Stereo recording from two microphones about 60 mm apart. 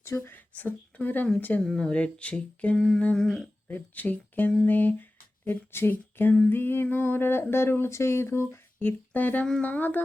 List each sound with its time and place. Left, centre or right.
0.3 s speech: left
1.6 s humming: centre
1.9 s speech: left
2.7 s humming: centre
3.7 s speech: left
5.5 s a sound: left
7.5 s speech: left
8.8 s speech: left